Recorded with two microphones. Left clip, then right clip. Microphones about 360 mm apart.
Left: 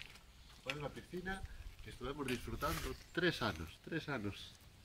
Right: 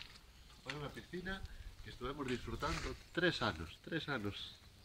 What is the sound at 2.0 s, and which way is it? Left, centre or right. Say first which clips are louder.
Speech: even; centre.